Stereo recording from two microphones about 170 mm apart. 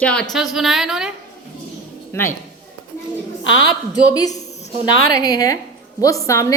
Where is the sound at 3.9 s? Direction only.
20° left (ahead or behind).